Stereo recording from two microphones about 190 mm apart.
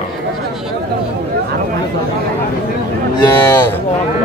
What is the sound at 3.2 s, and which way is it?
Speech, 15° left (ahead or behind).